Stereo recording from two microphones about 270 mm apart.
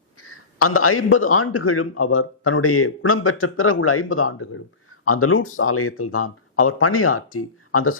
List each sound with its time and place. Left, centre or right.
0.2 s a man's voice: left